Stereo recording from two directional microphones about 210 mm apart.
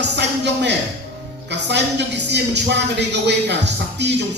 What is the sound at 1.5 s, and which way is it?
A woman's voice, 55° right (ahead or behind).